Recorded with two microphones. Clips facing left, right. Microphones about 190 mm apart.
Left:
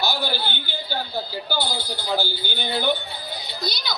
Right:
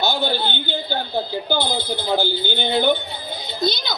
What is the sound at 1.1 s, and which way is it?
Speech, 20° right (ahead or behind).